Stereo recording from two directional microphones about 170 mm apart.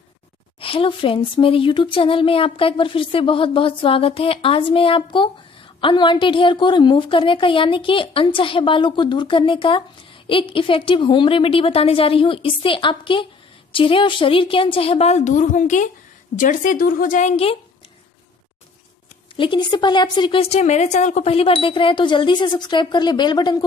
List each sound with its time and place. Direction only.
0.6 s a woman's voice: 30° left (ahead or behind)
19.3 s a woman's voice: 30° left (ahead or behind)